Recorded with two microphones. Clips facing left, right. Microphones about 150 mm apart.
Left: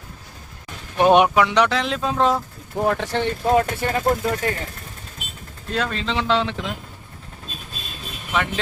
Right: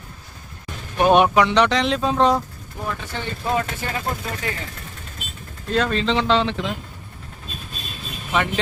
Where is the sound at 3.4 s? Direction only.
45° left (ahead or behind).